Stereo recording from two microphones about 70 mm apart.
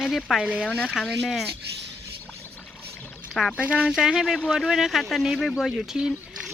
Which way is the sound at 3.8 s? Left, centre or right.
Centre.